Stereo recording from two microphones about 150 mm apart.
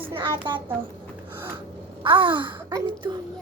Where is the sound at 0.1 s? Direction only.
35° right (ahead or behind).